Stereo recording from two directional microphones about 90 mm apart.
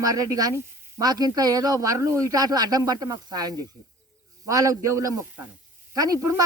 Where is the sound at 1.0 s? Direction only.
45° right (ahead or behind).